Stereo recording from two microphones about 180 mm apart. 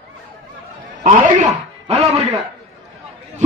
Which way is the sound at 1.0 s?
40° right (ahead or behind).